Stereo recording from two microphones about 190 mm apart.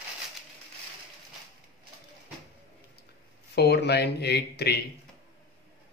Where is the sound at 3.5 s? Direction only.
60° left (ahead or behind).